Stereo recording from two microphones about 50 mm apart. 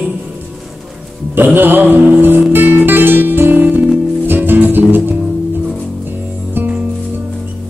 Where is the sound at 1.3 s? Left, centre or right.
Right.